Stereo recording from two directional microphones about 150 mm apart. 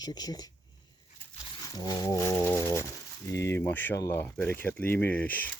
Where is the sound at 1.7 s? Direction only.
25° left (ahead or behind).